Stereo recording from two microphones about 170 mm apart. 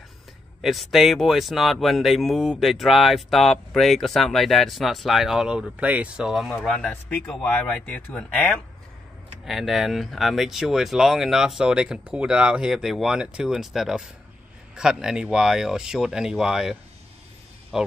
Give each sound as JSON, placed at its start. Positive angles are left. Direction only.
{"t": 0.6, "sound": "speech", "side_deg": 0}
{"t": 9.5, "sound": "speech", "side_deg": 0}
{"t": 17.7, "sound": "speech", "side_deg": 0}